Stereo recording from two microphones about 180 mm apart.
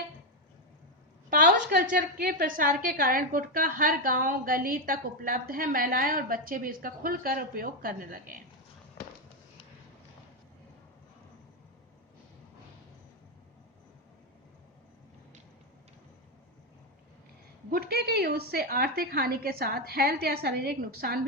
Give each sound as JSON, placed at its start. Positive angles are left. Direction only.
{"t": 1.3, "sound": "a woman's voice", "side_deg": -50}
{"t": 17.7, "sound": "a woman's voice", "side_deg": -60}